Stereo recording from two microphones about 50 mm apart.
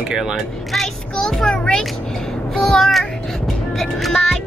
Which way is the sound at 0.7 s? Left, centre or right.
Centre.